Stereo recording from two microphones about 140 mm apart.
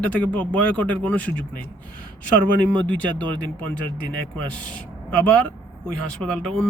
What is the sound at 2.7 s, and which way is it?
Speech, 10° left (ahead or behind).